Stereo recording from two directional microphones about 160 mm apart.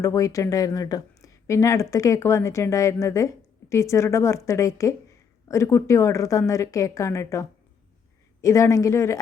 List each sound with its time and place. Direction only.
0.0 s speech: 20° left (ahead or behind)